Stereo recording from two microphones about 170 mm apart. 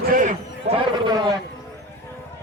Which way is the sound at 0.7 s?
25° right (ahead or behind).